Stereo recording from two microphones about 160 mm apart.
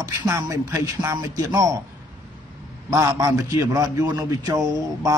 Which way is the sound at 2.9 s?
20° right (ahead or behind).